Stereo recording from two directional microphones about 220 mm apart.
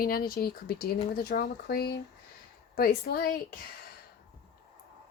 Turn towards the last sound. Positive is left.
turn(degrees=45)  # may be behind; listen again after turning